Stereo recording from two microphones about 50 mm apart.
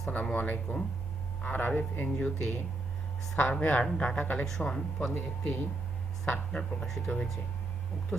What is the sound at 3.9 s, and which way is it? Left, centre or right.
Speech, left.